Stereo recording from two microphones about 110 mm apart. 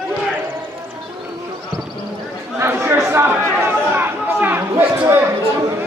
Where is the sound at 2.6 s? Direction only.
20° right (ahead or behind).